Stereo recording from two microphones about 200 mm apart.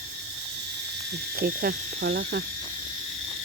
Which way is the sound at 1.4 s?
50° right (ahead or behind).